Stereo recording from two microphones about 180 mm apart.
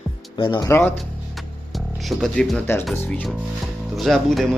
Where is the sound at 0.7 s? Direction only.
15° left (ahead or behind).